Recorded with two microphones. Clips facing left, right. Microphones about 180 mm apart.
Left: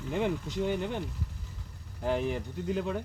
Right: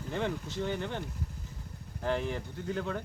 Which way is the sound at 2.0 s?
10° left (ahead or behind).